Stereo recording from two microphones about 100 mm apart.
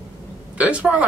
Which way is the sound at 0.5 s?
10° right (ahead or behind).